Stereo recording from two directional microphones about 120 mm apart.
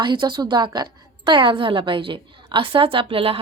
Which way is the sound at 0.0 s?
40° right (ahead or behind).